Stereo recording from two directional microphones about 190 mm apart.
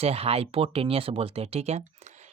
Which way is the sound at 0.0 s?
30° right (ahead or behind).